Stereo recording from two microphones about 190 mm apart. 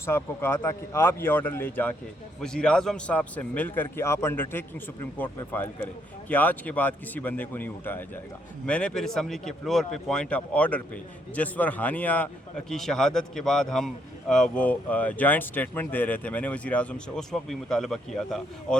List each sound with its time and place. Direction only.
0.0 s a man's voice: 15° left (ahead or behind)